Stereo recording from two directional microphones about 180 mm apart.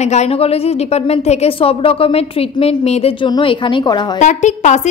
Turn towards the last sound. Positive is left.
turn(degrees=40)  # may be behind; listen again after turning